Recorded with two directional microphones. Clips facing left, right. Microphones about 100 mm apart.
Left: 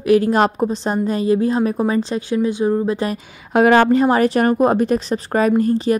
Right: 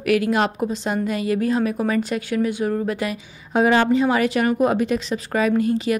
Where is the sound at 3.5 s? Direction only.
65° left (ahead or behind).